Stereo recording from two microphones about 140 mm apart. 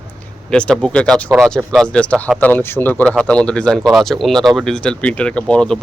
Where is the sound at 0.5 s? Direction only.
5° left (ahead or behind).